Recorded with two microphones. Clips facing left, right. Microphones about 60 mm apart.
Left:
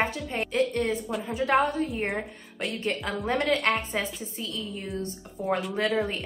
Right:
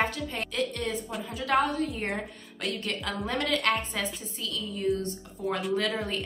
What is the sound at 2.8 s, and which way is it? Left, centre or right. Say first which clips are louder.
Speech: left 4 dB; centre.